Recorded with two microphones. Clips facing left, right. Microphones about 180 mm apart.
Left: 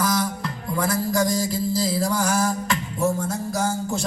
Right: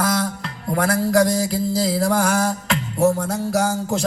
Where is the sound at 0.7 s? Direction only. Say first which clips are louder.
Right 5 dB; 65° right (ahead or behind).